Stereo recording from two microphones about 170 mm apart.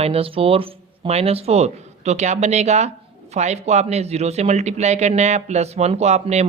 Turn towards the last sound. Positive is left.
turn(degrees=-40)  # may be behind; listen again after turning